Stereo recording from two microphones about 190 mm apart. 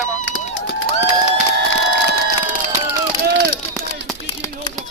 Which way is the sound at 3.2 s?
55° right (ahead or behind).